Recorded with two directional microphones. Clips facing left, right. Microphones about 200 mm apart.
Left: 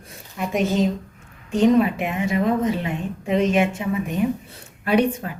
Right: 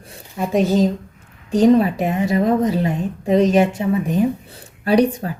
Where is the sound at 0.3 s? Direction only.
35° right (ahead or behind).